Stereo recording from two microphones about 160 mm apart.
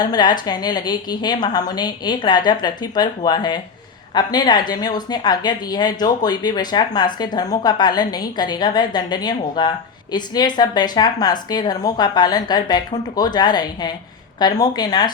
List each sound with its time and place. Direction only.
0.0 s a woman's voice: 25° left (ahead or behind)